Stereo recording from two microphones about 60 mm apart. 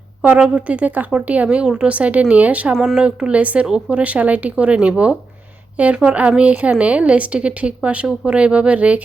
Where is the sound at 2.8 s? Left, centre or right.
Centre.